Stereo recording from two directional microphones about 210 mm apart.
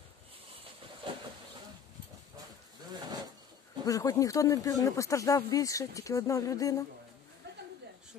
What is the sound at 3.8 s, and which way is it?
Speech, 15° left (ahead or behind).